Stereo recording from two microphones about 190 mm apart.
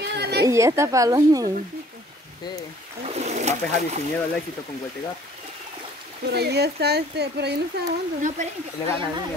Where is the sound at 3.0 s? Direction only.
35° right (ahead or behind).